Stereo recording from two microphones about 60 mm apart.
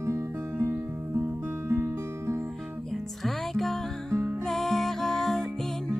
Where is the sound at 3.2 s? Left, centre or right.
Centre.